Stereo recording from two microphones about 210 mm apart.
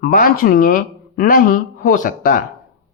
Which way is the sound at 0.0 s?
40° left (ahead or behind).